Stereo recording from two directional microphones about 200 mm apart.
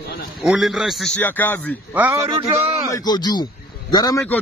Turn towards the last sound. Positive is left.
turn(degrees=20)  # may be behind; listen again after turning